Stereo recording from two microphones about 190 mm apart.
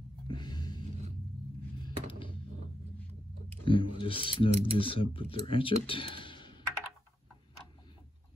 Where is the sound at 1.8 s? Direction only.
25° left (ahead or behind).